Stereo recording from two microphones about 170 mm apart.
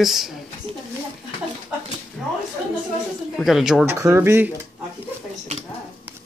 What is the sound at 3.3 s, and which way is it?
Speech, centre (ahead or behind).